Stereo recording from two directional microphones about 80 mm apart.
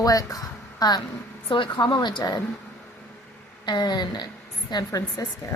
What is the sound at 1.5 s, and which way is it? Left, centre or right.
Speech, left.